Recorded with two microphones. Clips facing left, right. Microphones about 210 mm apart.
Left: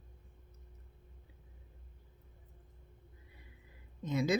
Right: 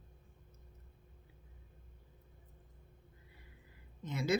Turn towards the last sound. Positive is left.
turn(degrees=15)  # may be behind; listen again after turning